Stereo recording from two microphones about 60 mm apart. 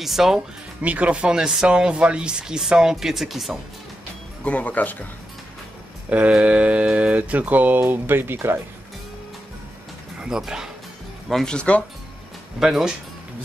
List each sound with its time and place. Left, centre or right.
0.0 s speech: centre
0.8 s speech: right; by 3.5 s centre
4.5 s speech: left
6.0 s speech: right
6.3 s mantra: right
7.8 s speech: right
10.2 s speech: centre
11.2 s speech: centre
11.5 s speech: centre
12.5 s speech: centre